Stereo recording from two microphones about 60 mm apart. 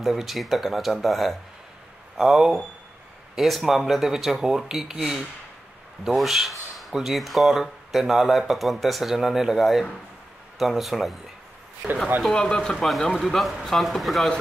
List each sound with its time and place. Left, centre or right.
0.0 s speech: centre
11.8 s speech: centre
12.3 s speech: centre
12.7 s speech: centre